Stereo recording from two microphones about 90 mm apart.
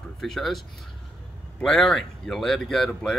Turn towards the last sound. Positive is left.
turn(degrees=5)  # may be behind; listen again after turning